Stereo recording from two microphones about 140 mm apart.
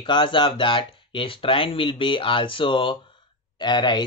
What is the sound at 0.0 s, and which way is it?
Speech, 35° left (ahead or behind).